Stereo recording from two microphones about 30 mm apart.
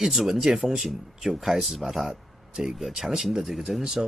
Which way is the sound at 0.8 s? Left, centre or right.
Centre.